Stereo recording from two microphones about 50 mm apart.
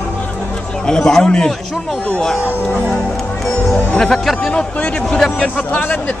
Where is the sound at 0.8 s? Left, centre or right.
Centre.